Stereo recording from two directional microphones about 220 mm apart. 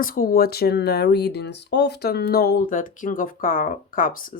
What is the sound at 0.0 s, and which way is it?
Speech, 40° left (ahead or behind).